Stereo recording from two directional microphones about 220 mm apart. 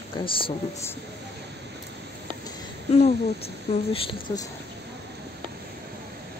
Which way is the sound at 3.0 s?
25° left (ahead or behind).